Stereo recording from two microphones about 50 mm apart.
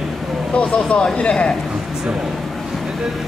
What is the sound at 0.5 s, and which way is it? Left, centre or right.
Speech, left.